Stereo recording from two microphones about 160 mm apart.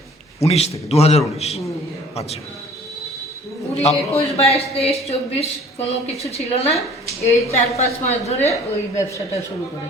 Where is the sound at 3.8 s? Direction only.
40° left (ahead or behind).